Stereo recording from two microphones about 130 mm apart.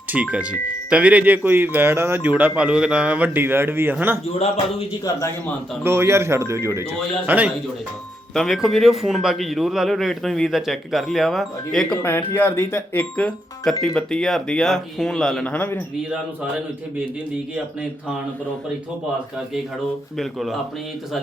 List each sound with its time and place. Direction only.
0.1 s speech: 10° right (ahead or behind)
5.8 s speech: 20° right (ahead or behind)
8.3 s a man's voice: centre (ahead or behind)
12.3 s a man's voice: 15° left (ahead or behind)
20.1 s a man's voice: centre (ahead or behind)